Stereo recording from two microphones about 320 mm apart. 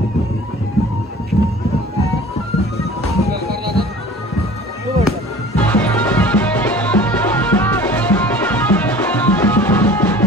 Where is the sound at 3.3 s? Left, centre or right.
Right.